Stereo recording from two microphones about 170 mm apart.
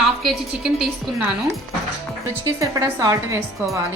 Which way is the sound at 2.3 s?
15° right (ahead or behind).